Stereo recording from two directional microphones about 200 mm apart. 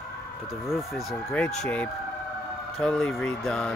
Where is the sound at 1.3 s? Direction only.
5° left (ahead or behind).